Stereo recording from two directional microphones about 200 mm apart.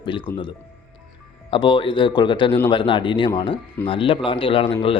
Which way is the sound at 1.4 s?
25° left (ahead or behind).